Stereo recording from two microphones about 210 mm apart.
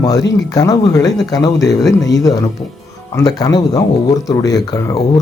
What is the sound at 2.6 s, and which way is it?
Speech, 25° left (ahead or behind).